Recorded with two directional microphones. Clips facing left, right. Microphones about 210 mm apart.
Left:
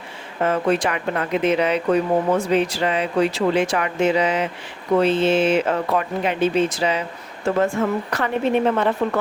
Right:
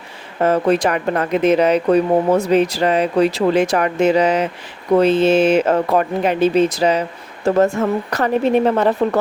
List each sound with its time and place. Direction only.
0.4 s speech: 40° right (ahead or behind)